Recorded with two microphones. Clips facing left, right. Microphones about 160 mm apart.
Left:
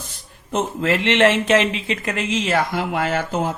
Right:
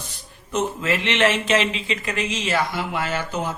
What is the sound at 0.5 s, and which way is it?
Speech, 60° left (ahead or behind).